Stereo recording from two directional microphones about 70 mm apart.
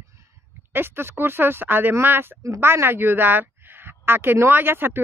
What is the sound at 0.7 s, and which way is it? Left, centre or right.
A woman's voice, right.